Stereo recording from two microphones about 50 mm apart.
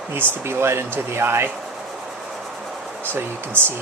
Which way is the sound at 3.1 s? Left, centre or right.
Right.